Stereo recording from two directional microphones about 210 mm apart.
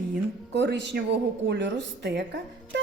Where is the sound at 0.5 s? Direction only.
55° right (ahead or behind).